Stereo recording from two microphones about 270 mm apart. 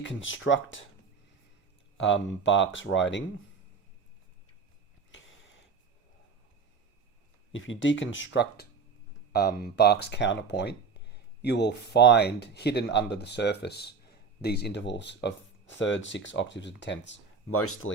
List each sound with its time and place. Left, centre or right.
0.0 s speech: left
2.0 s speech: left
5.1 s a sound: left
7.5 s speech: left